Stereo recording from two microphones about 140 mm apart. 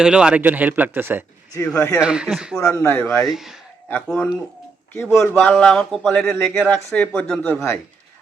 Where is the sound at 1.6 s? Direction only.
10° left (ahead or behind).